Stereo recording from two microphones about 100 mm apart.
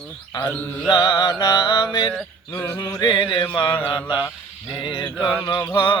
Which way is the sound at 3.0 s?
50° left (ahead or behind).